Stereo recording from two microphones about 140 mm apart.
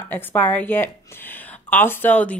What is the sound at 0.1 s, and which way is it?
A woman's voice, 10° left (ahead or behind).